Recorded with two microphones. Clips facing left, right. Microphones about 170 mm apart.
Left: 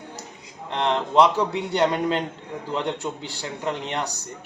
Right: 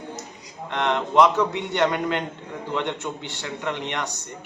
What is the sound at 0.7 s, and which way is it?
A man's voice, 30° left (ahead or behind).